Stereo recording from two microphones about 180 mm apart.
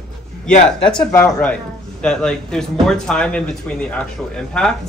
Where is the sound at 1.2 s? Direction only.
5° left (ahead or behind).